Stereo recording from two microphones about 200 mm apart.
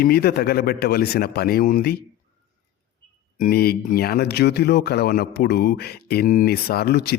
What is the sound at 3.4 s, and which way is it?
Speech, 50° left (ahead or behind).